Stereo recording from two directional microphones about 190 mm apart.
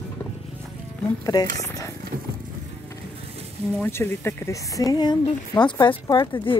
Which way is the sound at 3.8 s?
10° left (ahead or behind).